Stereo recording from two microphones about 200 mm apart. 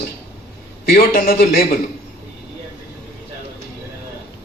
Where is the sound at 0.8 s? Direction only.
50° left (ahead or behind).